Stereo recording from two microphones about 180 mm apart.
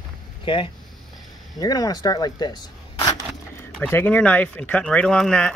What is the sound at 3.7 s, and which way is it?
Speech, 10° left (ahead or behind).